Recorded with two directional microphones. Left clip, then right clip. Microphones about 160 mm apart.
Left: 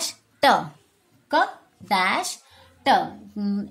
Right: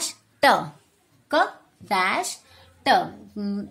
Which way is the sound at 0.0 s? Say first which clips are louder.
Even; 5° left (ahead or behind).